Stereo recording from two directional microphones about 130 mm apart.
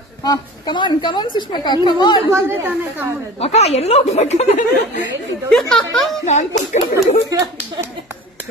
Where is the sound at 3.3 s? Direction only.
50° left (ahead or behind); by 5.0 s 70° left (ahead or behind).